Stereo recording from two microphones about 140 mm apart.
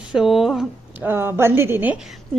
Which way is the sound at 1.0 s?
15° right (ahead or behind).